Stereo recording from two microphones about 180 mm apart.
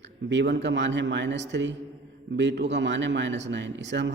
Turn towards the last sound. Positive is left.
turn(degrees=-80)